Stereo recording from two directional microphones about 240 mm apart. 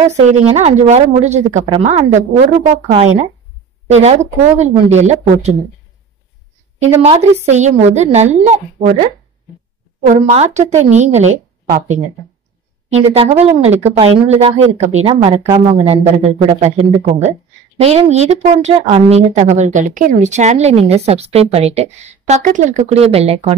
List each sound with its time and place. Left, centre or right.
0.1 s speech: right
7.4 s speech: right
12.9 s speech: right
15.7 s speech: right